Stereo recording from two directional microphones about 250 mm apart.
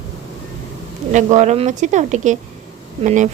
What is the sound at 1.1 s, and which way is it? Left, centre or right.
Speech, right.